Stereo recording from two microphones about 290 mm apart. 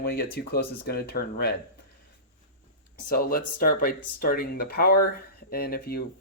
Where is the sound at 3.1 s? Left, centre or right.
Left.